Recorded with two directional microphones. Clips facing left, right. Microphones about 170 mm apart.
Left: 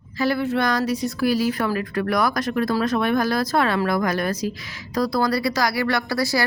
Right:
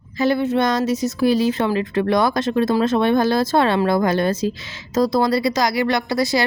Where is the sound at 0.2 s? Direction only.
20° right (ahead or behind).